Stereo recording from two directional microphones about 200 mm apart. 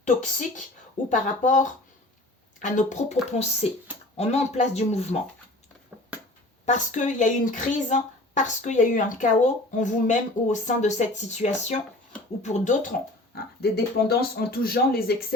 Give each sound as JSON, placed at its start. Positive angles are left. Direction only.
{"t": 0.0, "sound": "speech", "side_deg": 40}
{"t": 5.9, "sound": "a sound", "side_deg": -10}
{"t": 6.7, "sound": "speech", "side_deg": 40}